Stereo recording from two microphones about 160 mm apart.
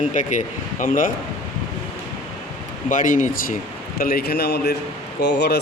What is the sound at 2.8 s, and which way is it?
Speech, 55° left (ahead or behind).